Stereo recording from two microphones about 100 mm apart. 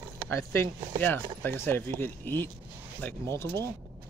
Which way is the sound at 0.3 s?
25° left (ahead or behind).